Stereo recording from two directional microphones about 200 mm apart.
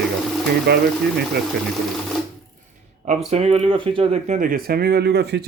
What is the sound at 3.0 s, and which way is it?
Speech, 30° right (ahead or behind).